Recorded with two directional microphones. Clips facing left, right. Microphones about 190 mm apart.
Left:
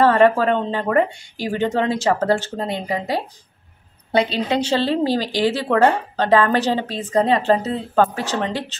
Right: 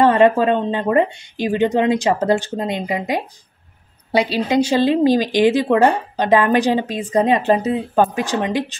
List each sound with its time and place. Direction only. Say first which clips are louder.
0.0 s speech: right 1 dB; 20° right (ahead or behind)